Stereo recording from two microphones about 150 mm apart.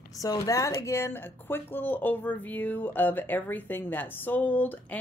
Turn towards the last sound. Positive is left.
turn(degrees=10)  # may be behind; listen again after turning